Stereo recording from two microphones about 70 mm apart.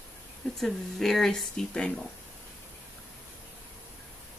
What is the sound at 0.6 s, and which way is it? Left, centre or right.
Speech, centre.